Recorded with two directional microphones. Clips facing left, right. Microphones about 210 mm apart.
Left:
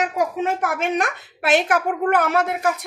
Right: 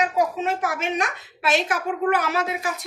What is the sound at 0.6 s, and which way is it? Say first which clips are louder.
A woman's voice: left 3 dB; 55° left (ahead or behind).